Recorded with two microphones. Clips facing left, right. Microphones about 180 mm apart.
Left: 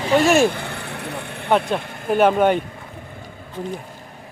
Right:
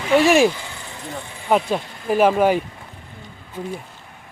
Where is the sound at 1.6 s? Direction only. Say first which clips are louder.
Even; centre (ahead or behind).